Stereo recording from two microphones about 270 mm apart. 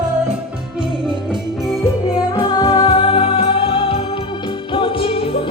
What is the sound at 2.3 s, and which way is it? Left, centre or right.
Music, centre.